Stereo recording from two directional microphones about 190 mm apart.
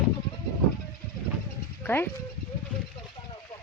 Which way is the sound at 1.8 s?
10° left (ahead or behind).